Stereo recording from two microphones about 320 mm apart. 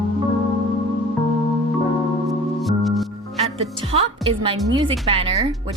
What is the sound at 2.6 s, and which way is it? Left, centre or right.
Music, centre.